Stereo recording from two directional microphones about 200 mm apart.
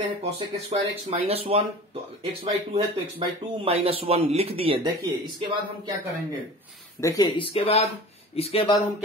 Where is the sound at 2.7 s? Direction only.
30° right (ahead or behind).